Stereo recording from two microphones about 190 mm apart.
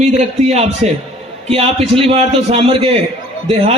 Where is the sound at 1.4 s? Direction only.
30° right (ahead or behind).